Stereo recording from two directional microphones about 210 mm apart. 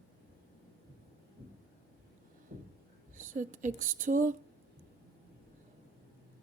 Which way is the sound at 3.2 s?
40° right (ahead or behind).